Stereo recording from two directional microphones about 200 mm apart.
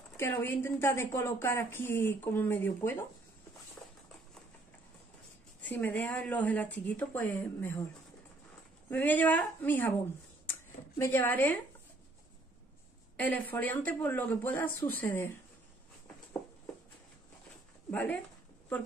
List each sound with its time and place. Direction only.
0.2 s a woman's voice: 10° left (ahead or behind)
5.6 s a woman's voice: 10° left (ahead or behind)
8.9 s a woman's voice: 10° left (ahead or behind)
13.1 s a woman's voice: 10° left (ahead or behind)
17.9 s a woman's voice: 10° left (ahead or behind)